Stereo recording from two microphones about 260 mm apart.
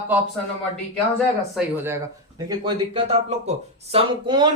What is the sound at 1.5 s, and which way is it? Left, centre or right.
A man's voice, centre.